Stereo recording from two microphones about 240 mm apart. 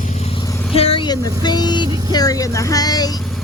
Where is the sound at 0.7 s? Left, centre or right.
Left.